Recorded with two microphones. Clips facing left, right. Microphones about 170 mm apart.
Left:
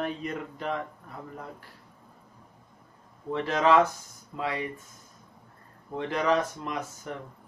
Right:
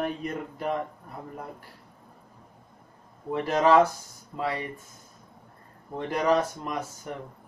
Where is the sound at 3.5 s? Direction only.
40° right (ahead or behind).